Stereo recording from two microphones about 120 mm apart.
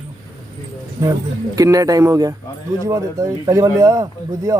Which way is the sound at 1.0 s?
25° right (ahead or behind).